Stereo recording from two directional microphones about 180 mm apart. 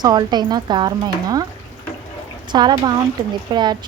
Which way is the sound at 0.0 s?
25° right (ahead or behind).